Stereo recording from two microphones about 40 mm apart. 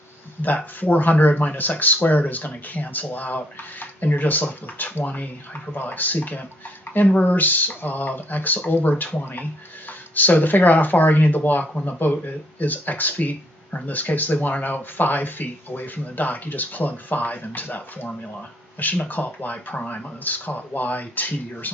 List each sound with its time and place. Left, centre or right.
0.4 s speech: left